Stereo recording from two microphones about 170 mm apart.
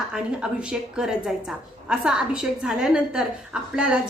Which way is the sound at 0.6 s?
5° right (ahead or behind).